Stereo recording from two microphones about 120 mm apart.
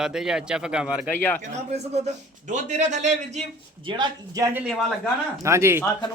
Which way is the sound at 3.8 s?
40° right (ahead or behind).